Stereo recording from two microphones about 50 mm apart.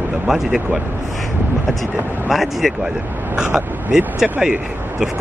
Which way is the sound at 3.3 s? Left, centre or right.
Centre.